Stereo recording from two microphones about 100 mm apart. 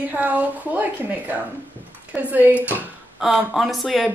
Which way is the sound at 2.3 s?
15° right (ahead or behind).